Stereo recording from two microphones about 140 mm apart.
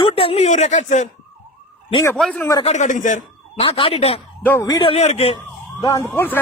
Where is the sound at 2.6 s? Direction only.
60° left (ahead or behind).